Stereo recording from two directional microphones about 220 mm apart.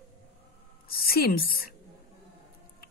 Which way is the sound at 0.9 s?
45° left (ahead or behind).